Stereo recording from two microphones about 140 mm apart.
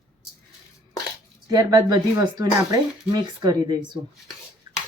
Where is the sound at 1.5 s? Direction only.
30° right (ahead or behind).